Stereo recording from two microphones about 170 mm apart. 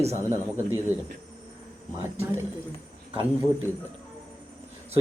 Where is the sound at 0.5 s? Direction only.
15° right (ahead or behind).